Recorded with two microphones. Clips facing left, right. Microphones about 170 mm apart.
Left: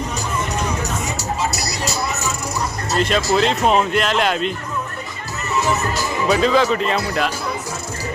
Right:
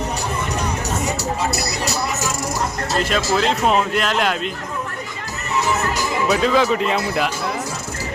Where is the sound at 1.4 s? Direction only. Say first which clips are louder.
Right 1 dB; 60° right (ahead or behind).